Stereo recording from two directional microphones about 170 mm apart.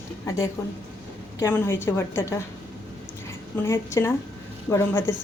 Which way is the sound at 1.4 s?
15° left (ahead or behind).